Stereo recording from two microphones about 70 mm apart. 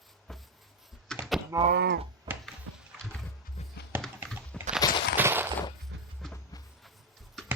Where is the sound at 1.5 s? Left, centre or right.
Right.